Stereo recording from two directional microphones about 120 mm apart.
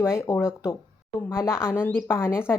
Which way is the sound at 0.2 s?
20° left (ahead or behind).